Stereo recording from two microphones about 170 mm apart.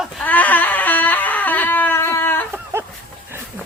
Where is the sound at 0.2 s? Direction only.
10° left (ahead or behind).